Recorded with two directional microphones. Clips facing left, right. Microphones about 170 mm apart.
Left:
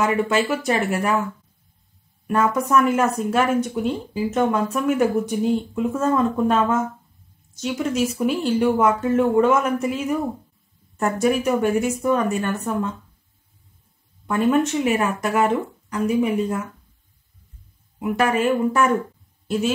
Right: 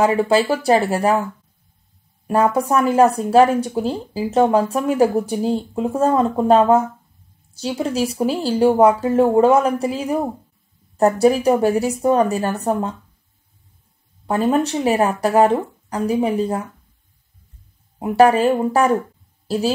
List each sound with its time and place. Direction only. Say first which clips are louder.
0.0 s speech: right 4 dB; 35° right (ahead or behind)
2.2 s a woman's voice: right 3 dB; 35° right (ahead or behind)
14.2 s speech: right 1 dB; 35° right (ahead or behind)
17.9 s speech: right 7 dB; 35° right (ahead or behind)